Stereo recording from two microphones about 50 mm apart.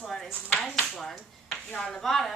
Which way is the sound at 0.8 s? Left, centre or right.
Centre.